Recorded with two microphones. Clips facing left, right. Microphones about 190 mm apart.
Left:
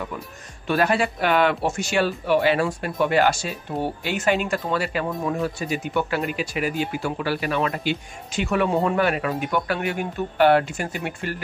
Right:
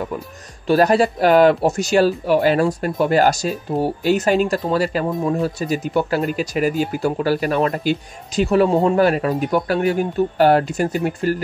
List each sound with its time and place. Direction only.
0.7 s speech: 40° right (ahead or behind)